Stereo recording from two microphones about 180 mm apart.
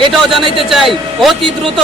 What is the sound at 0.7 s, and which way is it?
Speech, centre (ahead or behind).